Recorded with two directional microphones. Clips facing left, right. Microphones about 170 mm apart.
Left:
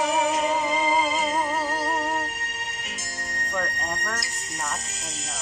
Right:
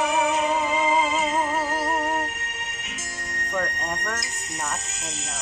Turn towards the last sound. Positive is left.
turn(degrees=-10)  # may be behind; listen again after turning